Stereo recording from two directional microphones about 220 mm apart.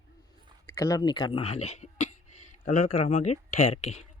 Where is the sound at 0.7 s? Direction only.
15° left (ahead or behind).